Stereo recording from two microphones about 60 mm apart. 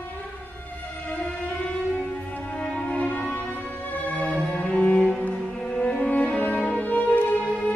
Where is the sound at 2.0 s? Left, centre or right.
Left.